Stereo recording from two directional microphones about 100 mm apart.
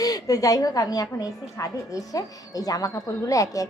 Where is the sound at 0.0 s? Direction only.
40° left (ahead or behind).